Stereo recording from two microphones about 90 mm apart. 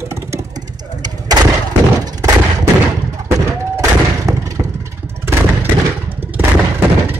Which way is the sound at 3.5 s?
35° right (ahead or behind).